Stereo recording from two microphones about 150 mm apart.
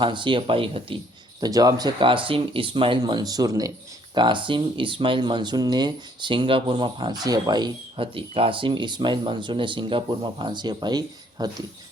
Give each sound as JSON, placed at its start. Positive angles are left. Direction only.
{"t": 0.0, "sound": "speech", "side_deg": -35}
{"t": 1.4, "sound": "speech", "side_deg": -25}